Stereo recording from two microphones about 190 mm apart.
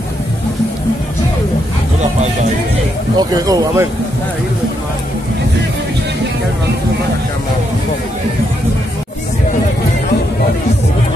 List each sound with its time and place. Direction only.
3.2 s speech: 20° right (ahead or behind)